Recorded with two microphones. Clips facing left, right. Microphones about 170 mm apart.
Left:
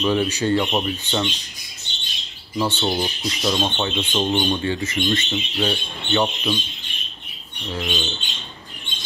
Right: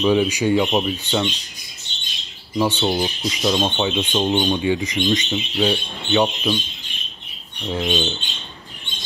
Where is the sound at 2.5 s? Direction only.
15° right (ahead or behind).